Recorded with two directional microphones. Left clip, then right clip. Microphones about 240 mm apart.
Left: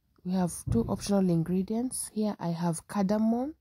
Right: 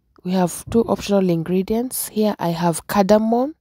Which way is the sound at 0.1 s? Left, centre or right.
Right.